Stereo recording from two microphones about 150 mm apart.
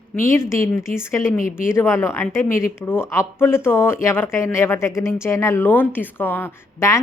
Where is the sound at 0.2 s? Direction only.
15° left (ahead or behind).